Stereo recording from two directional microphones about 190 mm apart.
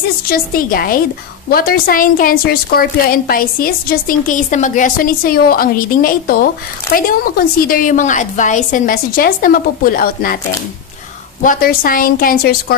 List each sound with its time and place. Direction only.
0.3 s a woman's voice: 50° left (ahead or behind)
11.4 s a woman's voice: 50° left (ahead or behind)